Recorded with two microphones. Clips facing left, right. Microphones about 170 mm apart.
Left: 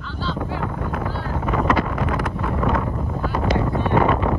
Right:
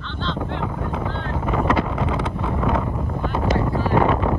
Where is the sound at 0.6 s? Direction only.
5° right (ahead or behind).